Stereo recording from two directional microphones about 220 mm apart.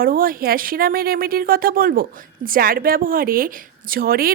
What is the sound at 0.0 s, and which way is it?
Speech, 40° right (ahead or behind).